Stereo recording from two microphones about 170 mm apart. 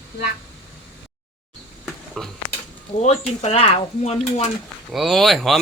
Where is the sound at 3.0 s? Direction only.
40° left (ahead or behind).